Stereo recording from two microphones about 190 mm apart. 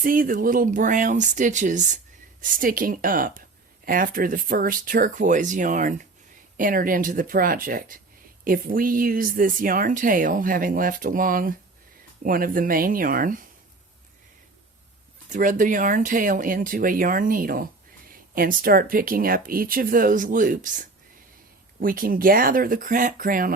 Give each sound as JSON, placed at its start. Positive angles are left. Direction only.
{"t": 0.0, "sound": "speech", "side_deg": -45}
{"t": 15.3, "sound": "speech", "side_deg": -45}